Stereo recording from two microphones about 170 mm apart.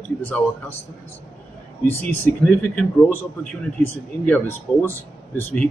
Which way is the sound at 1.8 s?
15° left (ahead or behind).